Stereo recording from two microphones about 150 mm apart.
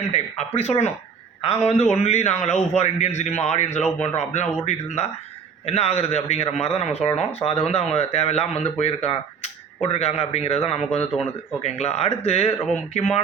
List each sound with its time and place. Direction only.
0.1 s speech: 45° left (ahead or behind)